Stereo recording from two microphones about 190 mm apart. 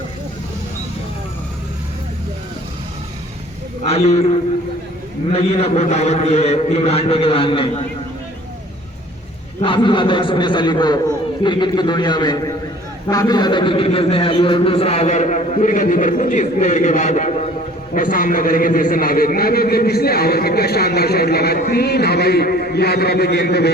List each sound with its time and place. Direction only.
3.8 s a man's voice: 35° left (ahead or behind)
9.6 s a man's voice: 25° left (ahead or behind); by 23.7 s 60° left (ahead or behind)